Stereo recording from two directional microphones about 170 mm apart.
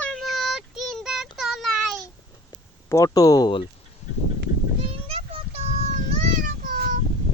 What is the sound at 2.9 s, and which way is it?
Speech, 20° left (ahead or behind).